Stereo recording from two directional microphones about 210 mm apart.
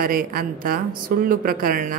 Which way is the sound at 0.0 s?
45° right (ahead or behind).